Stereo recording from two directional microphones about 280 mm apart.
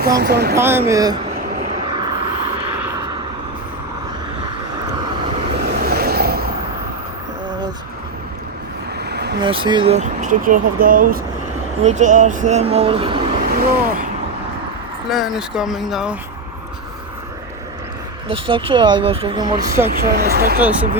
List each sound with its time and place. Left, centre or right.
0.2 s speech: right
0.5 s speech: centre
1.9 s vehicle: centre
5.6 s vehicle: right
9.0 s vehicle: right
9.4 s speech: centre
13.5 s speech: right
15.1 s speech: centre
18.3 s speech: centre
19.9 s speech: right